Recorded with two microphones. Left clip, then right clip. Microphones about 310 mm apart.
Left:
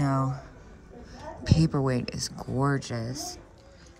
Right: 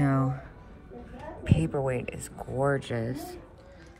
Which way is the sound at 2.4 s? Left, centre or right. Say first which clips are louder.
Right 2 dB; left.